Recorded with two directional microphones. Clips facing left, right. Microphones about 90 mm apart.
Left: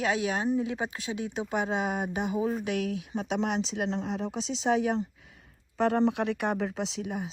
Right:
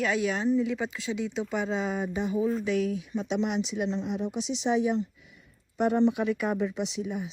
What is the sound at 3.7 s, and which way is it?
Speech, 90° left.